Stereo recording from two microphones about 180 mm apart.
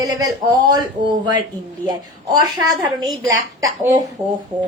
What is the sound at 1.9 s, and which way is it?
A woman's voice, 20° right (ahead or behind).